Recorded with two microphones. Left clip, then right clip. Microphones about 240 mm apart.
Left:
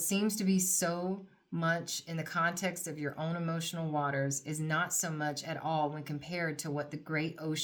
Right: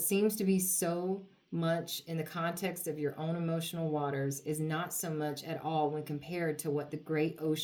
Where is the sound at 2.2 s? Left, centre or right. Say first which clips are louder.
Left 4 dB; left.